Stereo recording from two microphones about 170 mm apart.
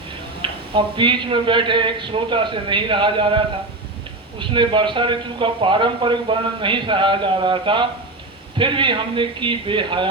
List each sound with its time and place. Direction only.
0.4 s a man's voice: 30° right (ahead or behind)